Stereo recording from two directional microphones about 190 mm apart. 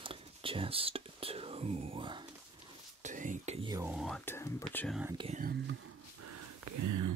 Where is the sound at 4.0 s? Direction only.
Centre (ahead or behind).